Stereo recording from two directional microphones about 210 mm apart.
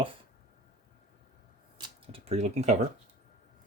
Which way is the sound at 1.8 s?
30° right (ahead or behind).